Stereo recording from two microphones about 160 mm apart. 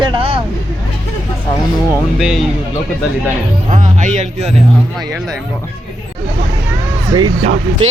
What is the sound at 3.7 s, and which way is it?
Speech, 50° right (ahead or behind).